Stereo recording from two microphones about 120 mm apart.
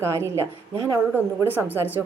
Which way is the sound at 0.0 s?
20° right (ahead or behind).